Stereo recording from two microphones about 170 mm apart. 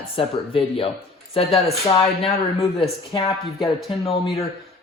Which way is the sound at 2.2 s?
35° left (ahead or behind).